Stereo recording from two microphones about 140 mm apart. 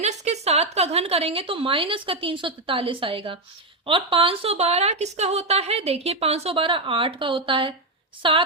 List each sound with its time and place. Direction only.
0.0 s a woman's voice: 50° right (ahead or behind)